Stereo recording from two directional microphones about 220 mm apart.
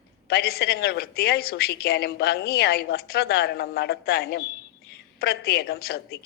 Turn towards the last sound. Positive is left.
turn(degrees=45)  # may be behind; listen again after turning